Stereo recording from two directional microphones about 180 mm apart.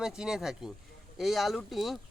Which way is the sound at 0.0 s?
5° right (ahead or behind).